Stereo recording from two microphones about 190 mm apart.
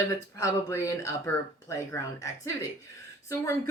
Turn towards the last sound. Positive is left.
turn(degrees=15)  # may be behind; listen again after turning